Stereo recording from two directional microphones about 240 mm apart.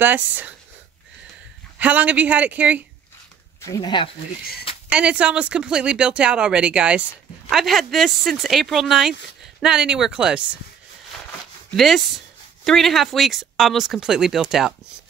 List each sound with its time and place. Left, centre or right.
0.0 s a man's voice: centre
1.8 s a man's voice: centre
3.6 s speech: centre
4.8 s speech: centre
11.7 s speech: centre